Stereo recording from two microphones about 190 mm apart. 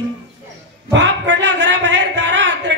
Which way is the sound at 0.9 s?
70° right (ahead or behind).